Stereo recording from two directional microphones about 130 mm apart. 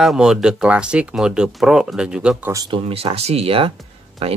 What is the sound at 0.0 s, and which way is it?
Speech, 5° right (ahead or behind).